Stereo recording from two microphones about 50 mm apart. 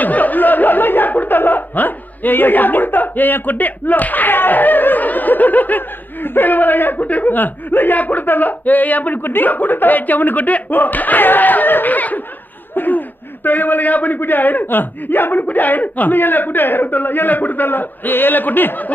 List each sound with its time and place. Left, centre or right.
0.0 s speech: left